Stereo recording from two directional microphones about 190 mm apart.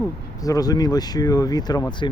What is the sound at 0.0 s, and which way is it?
Speech, 20° left (ahead or behind).